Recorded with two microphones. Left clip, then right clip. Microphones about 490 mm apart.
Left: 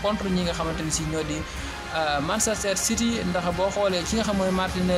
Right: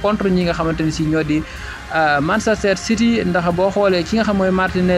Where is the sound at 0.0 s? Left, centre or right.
Left.